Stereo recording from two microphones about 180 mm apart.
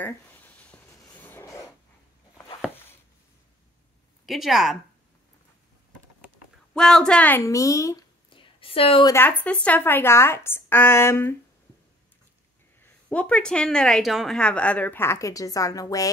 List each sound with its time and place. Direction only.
0.0 s a sound: 10° left (ahead or behind)
4.3 s speech: centre (ahead or behind)
6.7 s speech: 5° left (ahead or behind)
8.3 s a sound: 30° left (ahead or behind)
9.1 s speech: 10° left (ahead or behind)
12.8 s speech: 5° left (ahead or behind)